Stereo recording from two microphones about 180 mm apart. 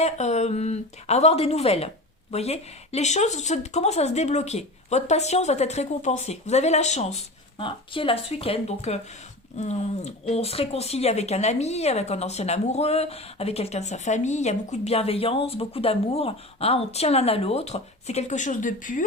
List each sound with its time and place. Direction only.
0.0 s speech: 40° left (ahead or behind)